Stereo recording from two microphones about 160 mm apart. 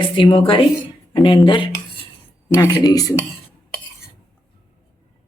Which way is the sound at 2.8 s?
25° left (ahead or behind).